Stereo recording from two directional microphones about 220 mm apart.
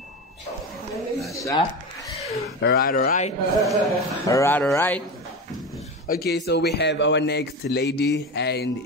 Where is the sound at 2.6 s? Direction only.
40° left (ahead or behind).